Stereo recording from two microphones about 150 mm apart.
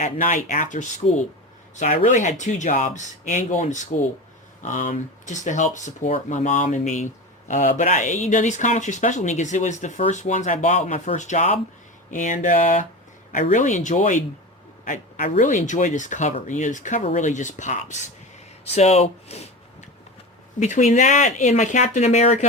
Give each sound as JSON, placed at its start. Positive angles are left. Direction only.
{"t": 0.0, "sound": "speech", "side_deg": 55}
{"t": 20.6, "sound": "speech", "side_deg": 55}